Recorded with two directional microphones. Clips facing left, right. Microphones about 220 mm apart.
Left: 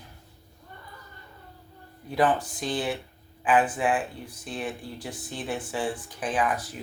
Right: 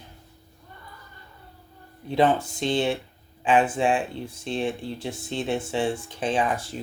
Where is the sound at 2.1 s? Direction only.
25° right (ahead or behind).